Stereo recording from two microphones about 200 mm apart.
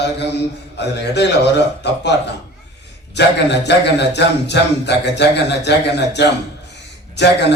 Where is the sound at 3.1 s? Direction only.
60° left (ahead or behind).